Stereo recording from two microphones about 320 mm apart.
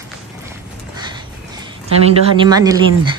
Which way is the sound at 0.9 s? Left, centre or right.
Centre.